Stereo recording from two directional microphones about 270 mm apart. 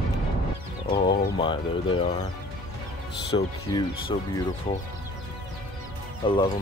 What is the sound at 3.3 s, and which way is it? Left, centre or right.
Speech, centre.